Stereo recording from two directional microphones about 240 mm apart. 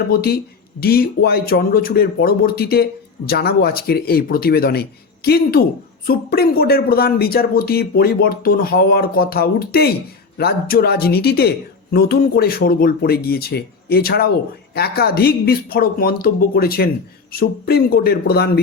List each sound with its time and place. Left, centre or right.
0.1 s speech: left